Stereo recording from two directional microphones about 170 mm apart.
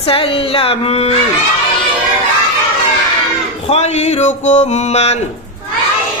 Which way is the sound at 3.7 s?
40° left (ahead or behind).